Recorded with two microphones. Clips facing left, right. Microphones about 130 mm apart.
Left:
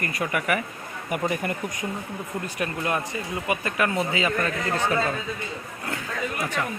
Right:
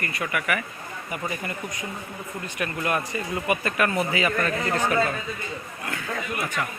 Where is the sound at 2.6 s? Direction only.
25° left (ahead or behind).